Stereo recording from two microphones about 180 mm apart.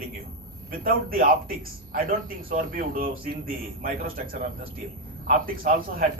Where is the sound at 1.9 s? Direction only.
50° right (ahead or behind).